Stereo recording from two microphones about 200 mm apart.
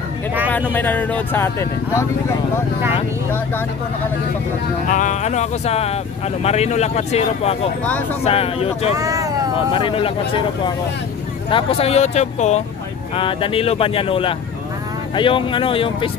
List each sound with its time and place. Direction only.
0.5 s speech: 10° left (ahead or behind)
4.8 s speech: 40° left (ahead or behind)
8.9 s vehicle: 15° right (ahead or behind)
9.7 s speech: 25° left (ahead or behind)